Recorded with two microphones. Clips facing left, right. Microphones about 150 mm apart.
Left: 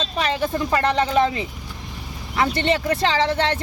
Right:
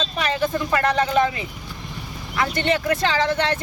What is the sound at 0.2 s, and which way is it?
Speech, 30° left (ahead or behind).